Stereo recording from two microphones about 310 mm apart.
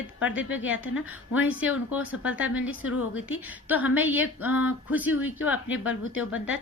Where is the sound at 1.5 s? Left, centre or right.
Centre.